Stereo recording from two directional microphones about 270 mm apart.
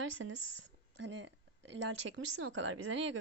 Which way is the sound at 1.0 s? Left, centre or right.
Right.